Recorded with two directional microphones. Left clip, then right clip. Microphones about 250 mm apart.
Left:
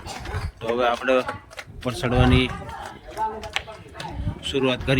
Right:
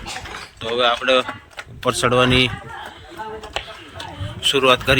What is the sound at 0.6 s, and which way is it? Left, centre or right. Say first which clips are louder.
Speech: right 4 dB; centre.